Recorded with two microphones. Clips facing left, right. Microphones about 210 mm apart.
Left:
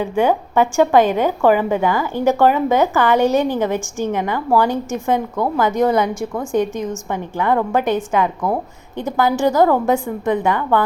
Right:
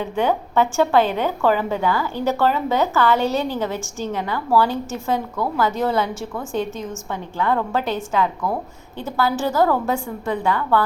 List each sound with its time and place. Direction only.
0.0 s a woman's voice: 10° left (ahead or behind)